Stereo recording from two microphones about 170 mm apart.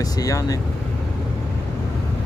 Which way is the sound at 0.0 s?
20° left (ahead or behind).